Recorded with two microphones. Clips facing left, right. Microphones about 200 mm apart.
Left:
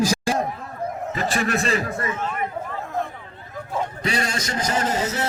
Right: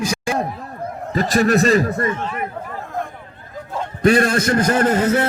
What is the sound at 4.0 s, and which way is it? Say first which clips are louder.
A man's voice: right 11 dB; 55° right (ahead or behind).